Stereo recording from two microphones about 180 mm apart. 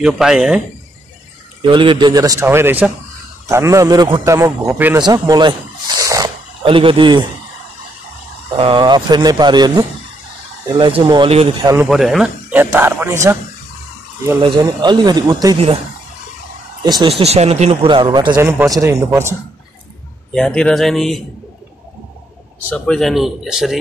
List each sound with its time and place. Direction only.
0.0 s speech: 5° right (ahead or behind)
1.6 s a man's voice: 25° right (ahead or behind)
8.5 s a man's voice: 30° right (ahead or behind)
11.6 s speech: 15° right (ahead or behind)
11.9 s speech: centre (ahead or behind)
14.4 s a man's voice: 25° right (ahead or behind)
16.8 s a man's voice: 20° right (ahead or behind)
17.2 s a man's voice: 35° right (ahead or behind); by 19.3 s 15° right (ahead or behind)
20.3 s speech: 5° left (ahead or behind)
22.7 s speech: 5° left (ahead or behind)